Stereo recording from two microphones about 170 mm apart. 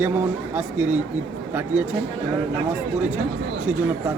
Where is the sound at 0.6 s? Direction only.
10° right (ahead or behind).